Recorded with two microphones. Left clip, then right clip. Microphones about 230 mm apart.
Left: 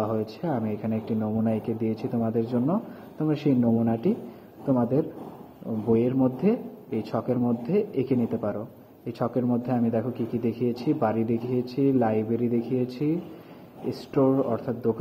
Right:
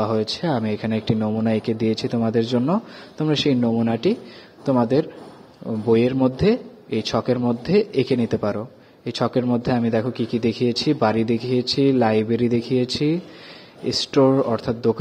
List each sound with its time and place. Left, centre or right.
0.0 s a man's voice: right